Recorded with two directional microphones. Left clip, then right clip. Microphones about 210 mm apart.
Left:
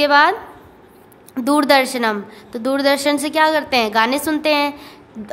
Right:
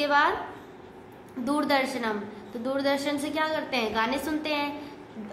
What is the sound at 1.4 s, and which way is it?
A woman's voice, 50° left (ahead or behind).